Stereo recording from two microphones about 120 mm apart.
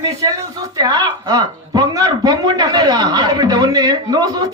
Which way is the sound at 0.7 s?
35° right (ahead or behind).